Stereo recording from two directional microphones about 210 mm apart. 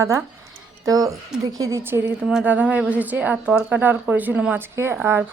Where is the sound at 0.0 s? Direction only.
15° right (ahead or behind).